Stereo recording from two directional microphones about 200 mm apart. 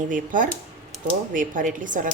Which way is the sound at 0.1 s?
40° right (ahead or behind).